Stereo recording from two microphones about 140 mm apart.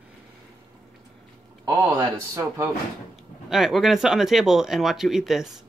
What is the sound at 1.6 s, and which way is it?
A man's voice, 25° right (ahead or behind).